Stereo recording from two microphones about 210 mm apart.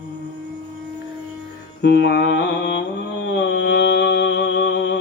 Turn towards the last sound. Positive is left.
turn(degrees=55)  # may be behind; listen again after turning